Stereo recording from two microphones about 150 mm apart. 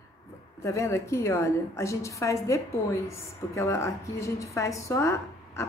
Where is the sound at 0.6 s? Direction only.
20° left (ahead or behind).